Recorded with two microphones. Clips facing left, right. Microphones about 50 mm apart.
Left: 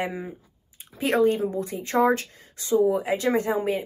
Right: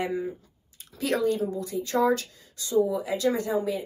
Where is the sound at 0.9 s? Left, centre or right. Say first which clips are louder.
Left 4 dB; left.